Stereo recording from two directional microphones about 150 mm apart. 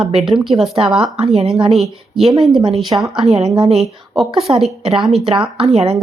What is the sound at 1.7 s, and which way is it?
Speech, centre (ahead or behind).